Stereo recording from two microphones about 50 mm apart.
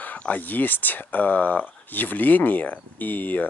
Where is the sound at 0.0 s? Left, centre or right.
Left.